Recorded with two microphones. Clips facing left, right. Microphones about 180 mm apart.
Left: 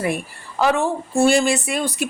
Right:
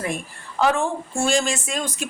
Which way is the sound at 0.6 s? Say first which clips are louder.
Left 2 dB; 5° left (ahead or behind).